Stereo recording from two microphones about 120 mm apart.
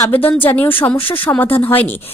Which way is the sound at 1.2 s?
15° left (ahead or behind).